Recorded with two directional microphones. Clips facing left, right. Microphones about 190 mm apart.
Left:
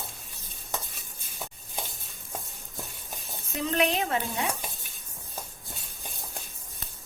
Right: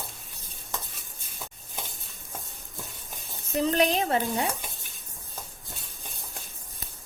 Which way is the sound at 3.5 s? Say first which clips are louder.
Right 3 dB; 35° right (ahead or behind).